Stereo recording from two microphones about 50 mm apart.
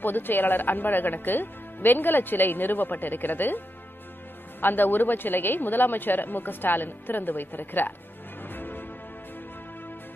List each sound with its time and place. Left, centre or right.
0.0 s speech: left
8.4 s music: left